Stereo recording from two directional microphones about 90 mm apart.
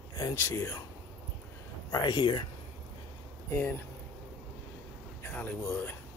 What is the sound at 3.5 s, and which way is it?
Speech, 25° left (ahead or behind).